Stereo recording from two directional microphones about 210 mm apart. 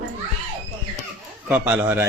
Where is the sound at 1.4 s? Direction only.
10° right (ahead or behind).